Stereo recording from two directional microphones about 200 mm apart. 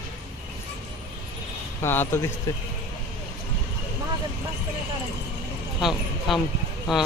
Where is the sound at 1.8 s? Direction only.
10° left (ahead or behind).